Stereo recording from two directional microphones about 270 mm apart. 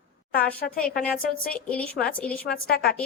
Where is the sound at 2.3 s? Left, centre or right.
Left.